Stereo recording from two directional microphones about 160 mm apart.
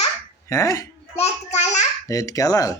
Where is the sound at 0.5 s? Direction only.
20° left (ahead or behind).